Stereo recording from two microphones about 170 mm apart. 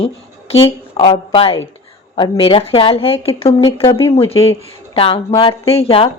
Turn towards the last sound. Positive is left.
turn(degrees=35)  # may be behind; listen again after turning